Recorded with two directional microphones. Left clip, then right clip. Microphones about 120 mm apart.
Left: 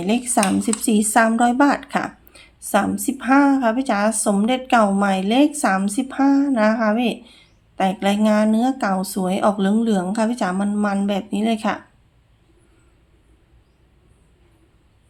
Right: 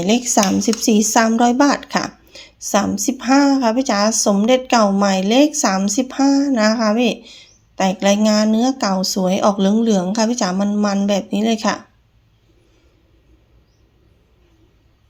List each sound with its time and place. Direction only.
0.0 s speech: 40° right (ahead or behind)